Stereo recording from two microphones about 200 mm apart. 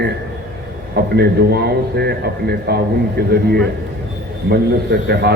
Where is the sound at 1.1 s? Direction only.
55° right (ahead or behind).